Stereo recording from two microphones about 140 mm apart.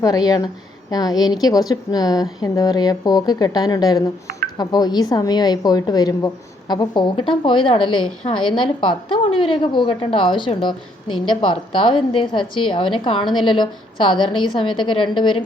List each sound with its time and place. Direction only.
0.3 s a woman's voice: 25° left (ahead or behind)